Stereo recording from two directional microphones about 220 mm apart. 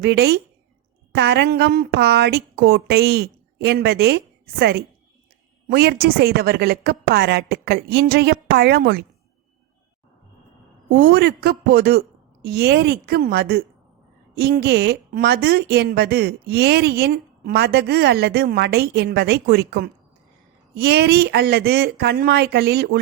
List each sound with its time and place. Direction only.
0.0 s speech: 50° right (ahead or behind)
5.7 s speech: 45° right (ahead or behind)
10.9 s speech: 45° right (ahead or behind)